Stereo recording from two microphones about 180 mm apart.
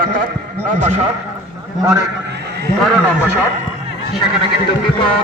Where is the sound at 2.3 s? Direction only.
65° right (ahead or behind).